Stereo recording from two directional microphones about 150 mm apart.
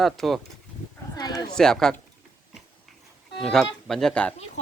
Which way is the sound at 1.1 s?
25° left (ahead or behind).